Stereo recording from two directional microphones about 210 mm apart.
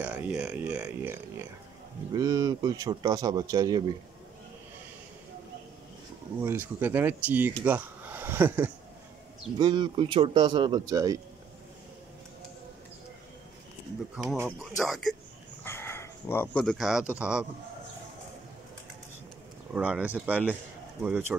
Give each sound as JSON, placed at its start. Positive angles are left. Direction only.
{"t": 0.0, "sound": "a man's voice", "side_deg": -5}
{"t": 6.4, "sound": "a man's voice", "side_deg": -10}
{"t": 9.6, "sound": "speech", "side_deg": -20}
{"t": 14.1, "sound": "a man's voice", "side_deg": -10}
{"t": 15.6, "sound": "speech", "side_deg": 10}
{"t": 19.7, "sound": "a man's voice", "side_deg": -5}